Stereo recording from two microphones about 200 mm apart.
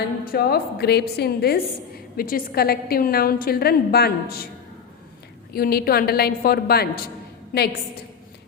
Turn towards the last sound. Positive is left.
turn(degrees=45)  # may be behind; listen again after turning